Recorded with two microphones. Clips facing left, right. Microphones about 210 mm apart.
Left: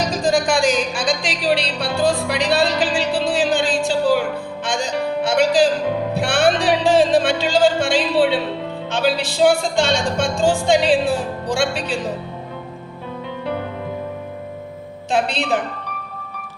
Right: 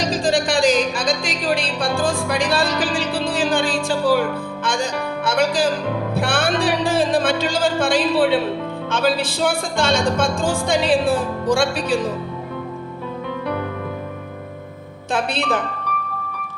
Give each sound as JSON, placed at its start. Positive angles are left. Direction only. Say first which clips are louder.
{"t": 0.0, "sound": "music", "louder": "left 1 dB", "side_deg": -30}
{"t": 8.9, "sound": "speech", "louder": "even", "side_deg": -55}
{"t": 15.1, "sound": "speech", "louder": "left 1 dB", "side_deg": -55}